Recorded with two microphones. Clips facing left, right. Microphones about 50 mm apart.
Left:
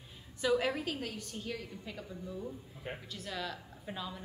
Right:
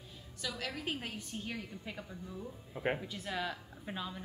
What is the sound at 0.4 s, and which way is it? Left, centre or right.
Speech, centre.